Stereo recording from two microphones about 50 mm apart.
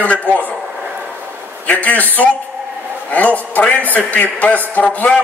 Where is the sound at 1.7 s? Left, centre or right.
Left.